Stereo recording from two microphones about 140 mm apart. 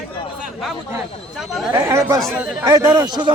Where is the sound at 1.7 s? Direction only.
20° right (ahead or behind).